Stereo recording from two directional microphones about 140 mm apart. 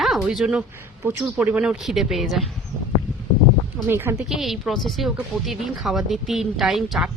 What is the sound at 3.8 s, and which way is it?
Speech, 15° right (ahead or behind).